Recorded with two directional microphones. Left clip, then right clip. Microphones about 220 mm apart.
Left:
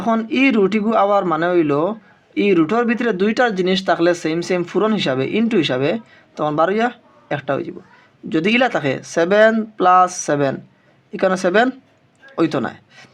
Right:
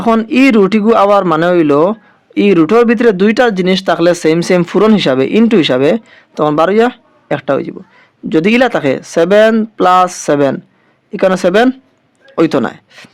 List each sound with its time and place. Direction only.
0.0 s a man's voice: 35° right (ahead or behind)